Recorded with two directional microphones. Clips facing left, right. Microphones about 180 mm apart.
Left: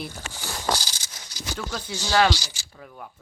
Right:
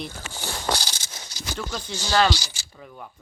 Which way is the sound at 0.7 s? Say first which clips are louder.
Left 1 dB; 65° right (ahead or behind).